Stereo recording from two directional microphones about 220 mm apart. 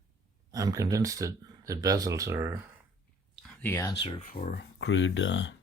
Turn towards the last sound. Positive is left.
turn(degrees=55)  # may be behind; listen again after turning